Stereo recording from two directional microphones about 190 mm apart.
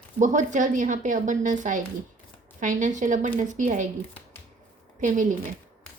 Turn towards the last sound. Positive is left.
turn(degrees=-40)  # may be behind; listen again after turning